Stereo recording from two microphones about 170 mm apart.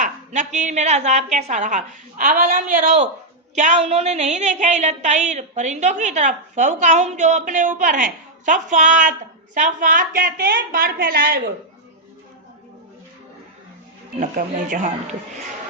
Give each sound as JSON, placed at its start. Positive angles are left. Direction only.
{"t": 0.0, "sound": "a woman's voice", "side_deg": -45}
{"t": 14.2, "sound": "a woman's voice", "side_deg": -50}